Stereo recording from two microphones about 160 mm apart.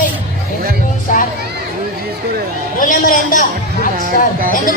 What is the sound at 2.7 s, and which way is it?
Speech, 60° left (ahead or behind).